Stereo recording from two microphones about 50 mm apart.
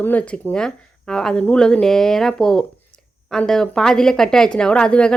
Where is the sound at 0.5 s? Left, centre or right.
Centre.